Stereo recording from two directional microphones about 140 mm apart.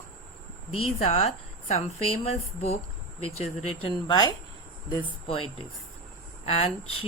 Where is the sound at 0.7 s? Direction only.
45° left (ahead or behind).